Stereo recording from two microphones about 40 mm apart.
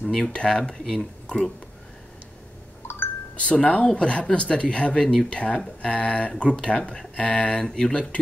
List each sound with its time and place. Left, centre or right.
0.0 s speech: centre
3.3 s speech: left